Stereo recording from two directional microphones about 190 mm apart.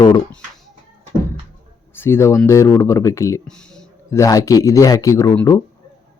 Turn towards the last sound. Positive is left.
turn(degrees=10)  # may be behind; listen again after turning